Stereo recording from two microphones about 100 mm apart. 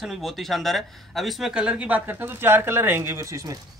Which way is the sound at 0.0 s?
Centre (ahead or behind).